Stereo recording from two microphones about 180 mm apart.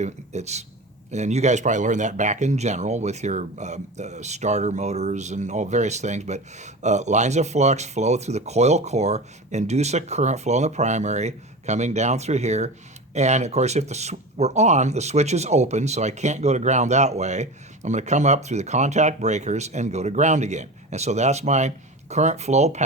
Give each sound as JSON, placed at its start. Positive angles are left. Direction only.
{"t": 0.0, "sound": "speech", "side_deg": -40}